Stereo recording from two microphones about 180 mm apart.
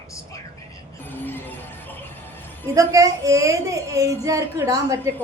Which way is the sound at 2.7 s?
20° right (ahead or behind).